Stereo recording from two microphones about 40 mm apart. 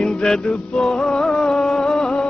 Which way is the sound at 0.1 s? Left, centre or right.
Centre.